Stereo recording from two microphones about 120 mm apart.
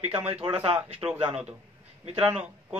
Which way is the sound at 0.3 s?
50° right (ahead or behind).